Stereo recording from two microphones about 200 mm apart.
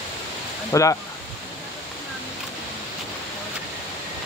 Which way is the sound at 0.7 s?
15° left (ahead or behind).